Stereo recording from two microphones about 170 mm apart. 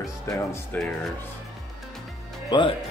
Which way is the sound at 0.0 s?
20° left (ahead or behind).